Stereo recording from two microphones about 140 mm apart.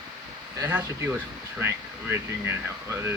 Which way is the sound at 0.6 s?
15° right (ahead or behind).